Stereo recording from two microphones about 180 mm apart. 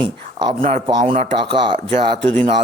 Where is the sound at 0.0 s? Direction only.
25° right (ahead or behind).